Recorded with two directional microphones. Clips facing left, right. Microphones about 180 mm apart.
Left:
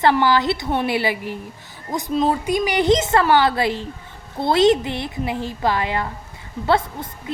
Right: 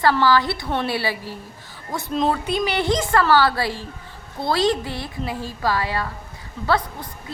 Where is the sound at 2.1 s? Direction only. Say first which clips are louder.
Left 2 dB; 5° left (ahead or behind); by 7.1 s 25° left (ahead or behind).